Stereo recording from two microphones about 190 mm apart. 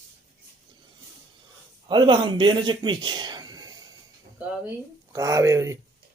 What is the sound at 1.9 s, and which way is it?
Speech, 25° right (ahead or behind).